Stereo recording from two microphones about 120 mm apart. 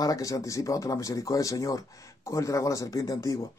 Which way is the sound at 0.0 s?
30° left (ahead or behind).